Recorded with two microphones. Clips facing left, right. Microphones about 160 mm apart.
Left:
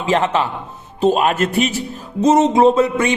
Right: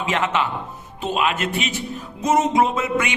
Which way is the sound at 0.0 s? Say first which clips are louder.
Left 5 dB; 35° left (ahead or behind).